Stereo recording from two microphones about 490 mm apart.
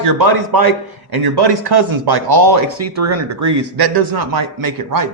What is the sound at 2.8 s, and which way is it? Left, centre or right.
Speech, right.